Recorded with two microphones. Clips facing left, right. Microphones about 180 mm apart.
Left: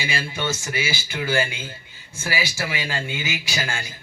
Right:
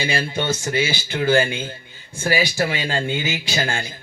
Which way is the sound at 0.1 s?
35° right (ahead or behind).